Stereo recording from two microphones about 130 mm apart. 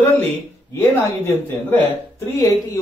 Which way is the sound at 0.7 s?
15° left (ahead or behind).